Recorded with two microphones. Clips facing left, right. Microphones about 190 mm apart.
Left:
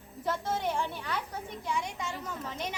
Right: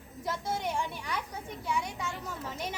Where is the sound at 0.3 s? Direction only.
10° right (ahead or behind).